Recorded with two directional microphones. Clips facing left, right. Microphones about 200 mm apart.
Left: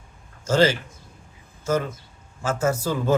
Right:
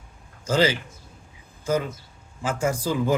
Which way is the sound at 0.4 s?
15° right (ahead or behind).